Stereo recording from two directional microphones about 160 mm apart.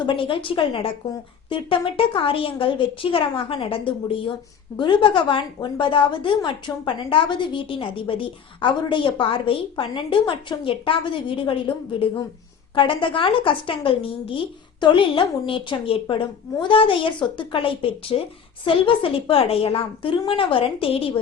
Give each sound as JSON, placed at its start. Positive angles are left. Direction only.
{"t": 0.0, "sound": "a woman's voice", "side_deg": 30}